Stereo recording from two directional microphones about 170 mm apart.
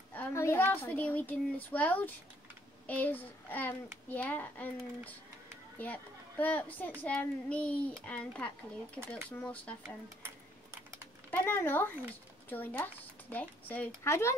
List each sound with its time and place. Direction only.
0.1 s a child's voice: 15° left (ahead or behind)
10.2 s typing: 15° right (ahead or behind)
11.2 s a child's voice: 10° left (ahead or behind)